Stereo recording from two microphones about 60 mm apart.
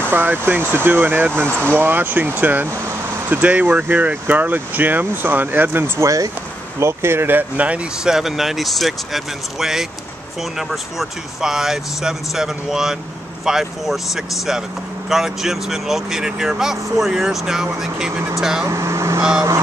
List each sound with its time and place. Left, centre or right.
0.0 s speech: right
1.5 s speech: left
1.8 s speech: right
5.9 s speech: right
6.8 s speech: right
8.0 s speech: centre
18.7 s speech: right